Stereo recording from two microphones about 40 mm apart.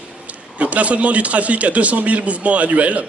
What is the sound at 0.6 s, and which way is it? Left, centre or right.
Speech, right.